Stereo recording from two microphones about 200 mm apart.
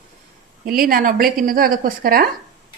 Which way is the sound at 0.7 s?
45° right (ahead or behind).